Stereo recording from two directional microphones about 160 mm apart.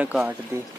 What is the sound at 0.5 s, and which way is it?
Speech, 15° right (ahead or behind).